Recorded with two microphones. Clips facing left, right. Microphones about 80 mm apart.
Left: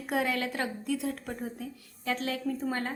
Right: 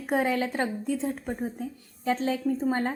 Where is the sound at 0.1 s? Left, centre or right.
Right.